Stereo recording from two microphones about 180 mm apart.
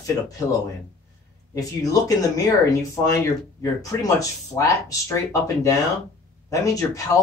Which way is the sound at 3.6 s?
20° left (ahead or behind).